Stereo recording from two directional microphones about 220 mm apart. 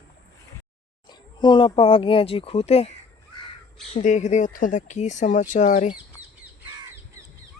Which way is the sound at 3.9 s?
35° left (ahead or behind).